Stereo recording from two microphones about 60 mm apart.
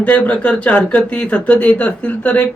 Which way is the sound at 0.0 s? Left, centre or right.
Left.